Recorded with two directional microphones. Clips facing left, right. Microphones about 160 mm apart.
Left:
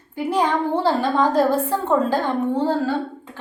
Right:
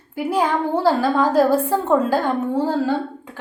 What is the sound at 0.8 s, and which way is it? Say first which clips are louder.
A woman's voice: right 3 dB; 10° right (ahead or behind).